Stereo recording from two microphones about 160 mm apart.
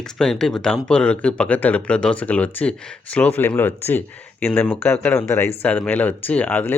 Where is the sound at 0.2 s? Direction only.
5° left (ahead or behind).